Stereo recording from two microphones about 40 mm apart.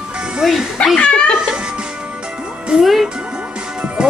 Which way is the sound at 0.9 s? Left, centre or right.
Left.